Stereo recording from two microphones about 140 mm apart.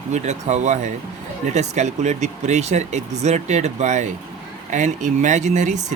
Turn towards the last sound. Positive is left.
turn(degrees=-60)  # may be behind; listen again after turning